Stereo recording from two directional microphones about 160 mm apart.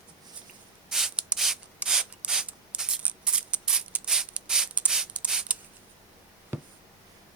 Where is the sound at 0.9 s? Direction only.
5° right (ahead or behind).